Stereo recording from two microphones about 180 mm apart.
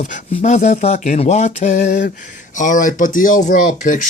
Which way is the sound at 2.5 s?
45° left (ahead or behind).